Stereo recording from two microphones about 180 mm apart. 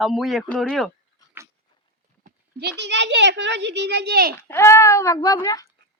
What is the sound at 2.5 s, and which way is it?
A child's voice, 70° right (ahead or behind).